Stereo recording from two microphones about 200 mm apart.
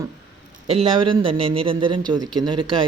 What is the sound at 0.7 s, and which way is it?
Speech, 30° right (ahead or behind).